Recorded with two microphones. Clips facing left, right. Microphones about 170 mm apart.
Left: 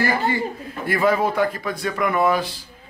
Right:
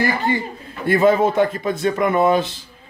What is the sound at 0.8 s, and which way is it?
Speech, 25° right (ahead or behind).